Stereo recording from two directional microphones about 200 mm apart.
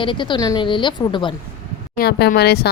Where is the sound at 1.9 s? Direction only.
50° left (ahead or behind).